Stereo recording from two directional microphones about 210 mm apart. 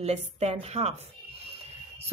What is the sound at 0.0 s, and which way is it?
Speech, 30° right (ahead or behind).